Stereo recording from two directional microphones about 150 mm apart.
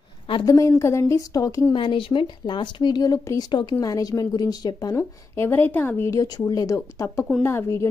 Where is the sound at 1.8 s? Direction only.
35° left (ahead or behind).